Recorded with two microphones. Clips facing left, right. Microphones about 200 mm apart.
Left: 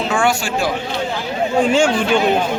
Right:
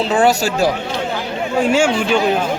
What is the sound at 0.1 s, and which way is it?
Speech, 35° right (ahead or behind).